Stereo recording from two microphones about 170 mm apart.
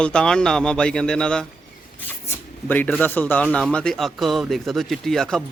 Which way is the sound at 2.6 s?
10° left (ahead or behind).